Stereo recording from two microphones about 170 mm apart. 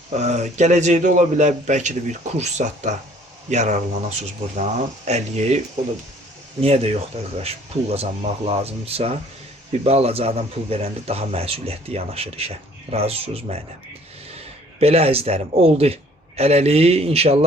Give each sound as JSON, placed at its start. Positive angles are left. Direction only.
{"t": 0.2, "sound": "a man's voice", "side_deg": -45}
{"t": 6.6, "sound": "a man's voice", "side_deg": -35}